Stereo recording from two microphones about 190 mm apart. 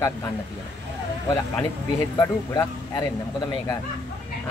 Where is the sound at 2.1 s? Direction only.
20° left (ahead or behind).